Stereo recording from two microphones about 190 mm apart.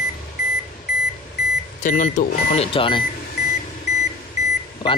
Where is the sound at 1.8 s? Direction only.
45° left (ahead or behind).